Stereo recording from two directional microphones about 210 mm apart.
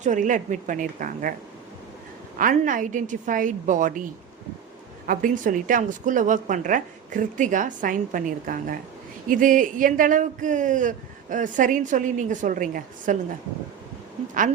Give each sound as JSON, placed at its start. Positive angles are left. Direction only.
{"t": 0.0, "sound": "speech", "side_deg": -35}
{"t": 2.4, "sound": "speech", "side_deg": -40}
{"t": 5.0, "sound": "speech", "side_deg": -40}